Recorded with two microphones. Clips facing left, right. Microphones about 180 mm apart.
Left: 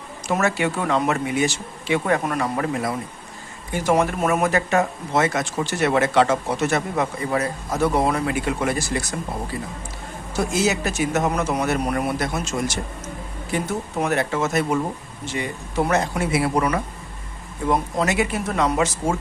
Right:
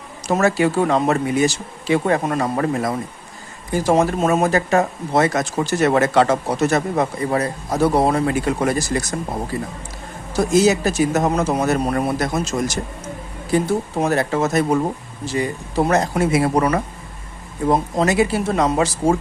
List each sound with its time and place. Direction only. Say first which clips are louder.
0.3 s speech: right 5 dB; 35° right (ahead or behind)
3.7 s speech: right 3 dB; 35° right (ahead or behind)
10.3 s speech: right 6 dB; 35° right (ahead or behind)